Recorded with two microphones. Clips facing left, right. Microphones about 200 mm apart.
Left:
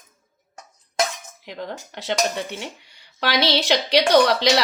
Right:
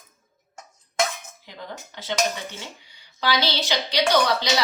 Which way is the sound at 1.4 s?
70° left (ahead or behind).